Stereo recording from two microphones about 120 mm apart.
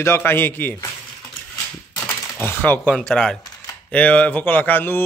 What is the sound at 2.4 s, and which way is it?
Speech, 15° left (ahead or behind).